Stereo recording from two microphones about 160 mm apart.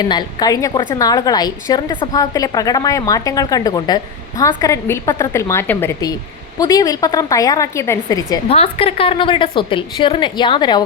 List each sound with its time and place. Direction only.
0.0 s a woman's voice: 25° left (ahead or behind)
8.4 s a woman's voice: 40° left (ahead or behind)